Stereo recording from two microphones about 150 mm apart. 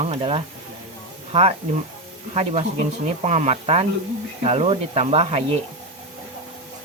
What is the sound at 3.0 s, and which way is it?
Speech, 50° right (ahead or behind).